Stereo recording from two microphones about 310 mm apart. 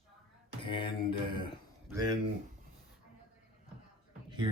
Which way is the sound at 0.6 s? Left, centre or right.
Centre.